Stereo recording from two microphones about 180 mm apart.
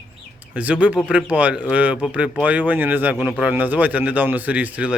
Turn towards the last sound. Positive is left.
turn(degrees=-10)  # may be behind; listen again after turning